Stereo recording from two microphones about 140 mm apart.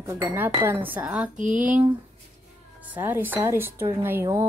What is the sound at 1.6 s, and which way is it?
Speech, 10° right (ahead or behind).